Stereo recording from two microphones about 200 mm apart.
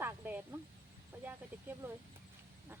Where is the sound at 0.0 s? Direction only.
10° right (ahead or behind).